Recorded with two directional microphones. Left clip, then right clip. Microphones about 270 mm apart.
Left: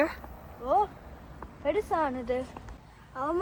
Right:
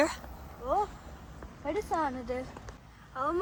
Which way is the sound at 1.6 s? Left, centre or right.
Left.